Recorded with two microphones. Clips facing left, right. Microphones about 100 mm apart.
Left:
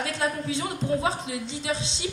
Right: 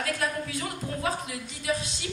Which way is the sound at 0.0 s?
25° left (ahead or behind).